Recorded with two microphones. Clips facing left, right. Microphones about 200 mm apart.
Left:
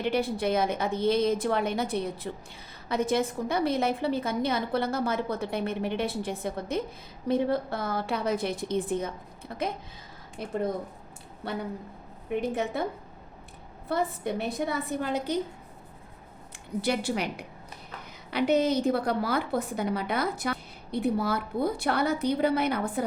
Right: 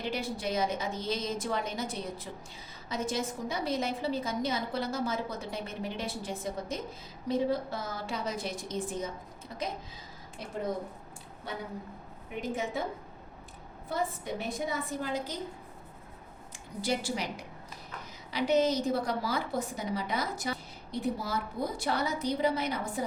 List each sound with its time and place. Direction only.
0.0 s a woman's voice: 60° left (ahead or behind)
11.4 s a woman's voice: 65° left (ahead or behind)
13.9 s a woman's voice: 65° left (ahead or behind)
16.8 s a woman's voice: 60° left (ahead or behind)